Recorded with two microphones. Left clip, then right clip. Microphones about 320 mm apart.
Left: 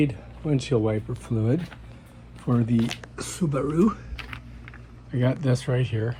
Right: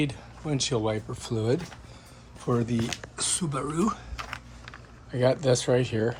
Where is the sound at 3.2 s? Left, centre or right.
Centre.